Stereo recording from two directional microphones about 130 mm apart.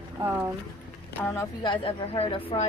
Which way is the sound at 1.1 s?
15° left (ahead or behind).